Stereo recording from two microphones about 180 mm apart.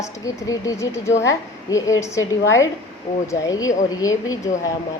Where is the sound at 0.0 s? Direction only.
20° left (ahead or behind).